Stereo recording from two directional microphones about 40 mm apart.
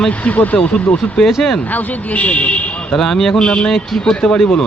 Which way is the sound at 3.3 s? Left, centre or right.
Left.